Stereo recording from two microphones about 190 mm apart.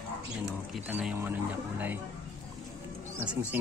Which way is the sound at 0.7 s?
5° right (ahead or behind).